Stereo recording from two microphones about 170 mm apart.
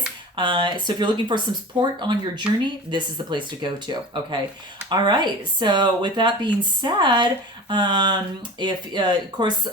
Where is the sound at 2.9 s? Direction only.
25° right (ahead or behind).